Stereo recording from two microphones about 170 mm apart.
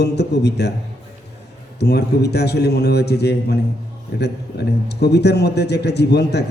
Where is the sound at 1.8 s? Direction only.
75° left (ahead or behind).